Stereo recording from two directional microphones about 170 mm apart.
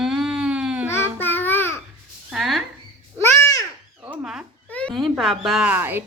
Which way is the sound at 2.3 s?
Centre (ahead or behind).